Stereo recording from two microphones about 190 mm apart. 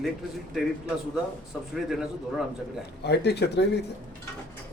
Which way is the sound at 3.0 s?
60° left (ahead or behind).